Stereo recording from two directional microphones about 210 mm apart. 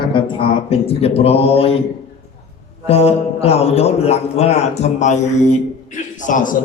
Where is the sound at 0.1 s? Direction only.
25° left (ahead or behind).